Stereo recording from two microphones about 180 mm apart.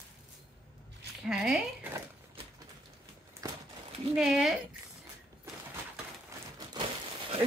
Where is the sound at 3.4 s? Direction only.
20° right (ahead or behind).